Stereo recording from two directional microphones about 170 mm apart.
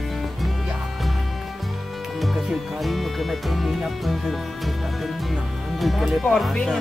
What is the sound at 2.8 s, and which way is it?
Speech, centre (ahead or behind).